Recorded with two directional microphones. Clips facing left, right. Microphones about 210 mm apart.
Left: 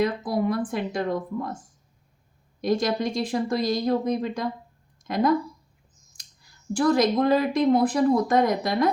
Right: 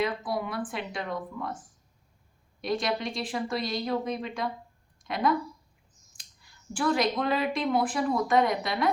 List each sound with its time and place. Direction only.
0.0 s speech: 40° left (ahead or behind)
2.6 s speech: 40° left (ahead or behind)